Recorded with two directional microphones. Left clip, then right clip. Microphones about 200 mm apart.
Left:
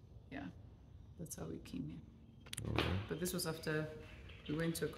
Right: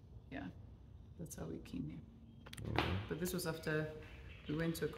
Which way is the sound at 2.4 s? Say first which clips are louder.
Left 3 dB; 20° left (ahead or behind).